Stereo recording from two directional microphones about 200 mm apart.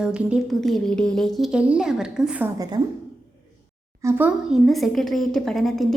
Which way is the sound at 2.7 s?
20° right (ahead or behind).